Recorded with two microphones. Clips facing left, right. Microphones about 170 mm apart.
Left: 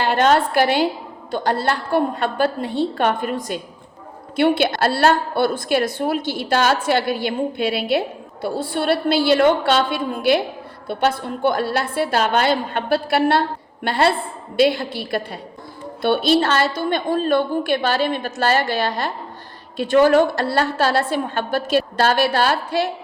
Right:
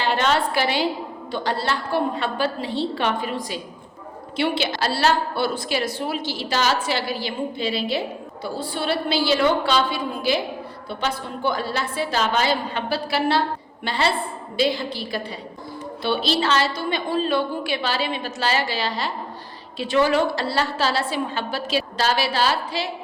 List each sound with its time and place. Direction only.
0.0 s a woman's voice: 50° left (ahead or behind)